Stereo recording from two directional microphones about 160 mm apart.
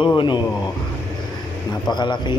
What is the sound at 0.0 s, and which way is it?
Speech, 30° left (ahead or behind).